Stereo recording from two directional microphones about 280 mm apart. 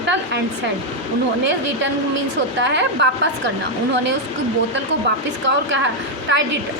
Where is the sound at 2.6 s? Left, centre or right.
Right.